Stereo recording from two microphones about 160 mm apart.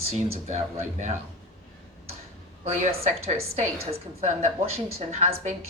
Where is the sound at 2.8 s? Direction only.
40° right (ahead or behind).